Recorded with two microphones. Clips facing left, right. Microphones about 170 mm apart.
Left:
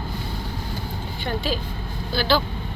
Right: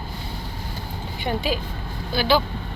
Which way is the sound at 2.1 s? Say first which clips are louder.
Right 1 dB; 15° right (ahead or behind).